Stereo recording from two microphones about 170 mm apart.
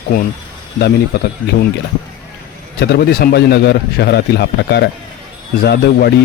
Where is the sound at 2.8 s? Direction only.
75° left (ahead or behind).